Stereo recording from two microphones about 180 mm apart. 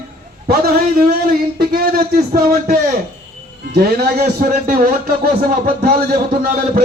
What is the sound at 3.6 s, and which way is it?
Speech, 55° right (ahead or behind).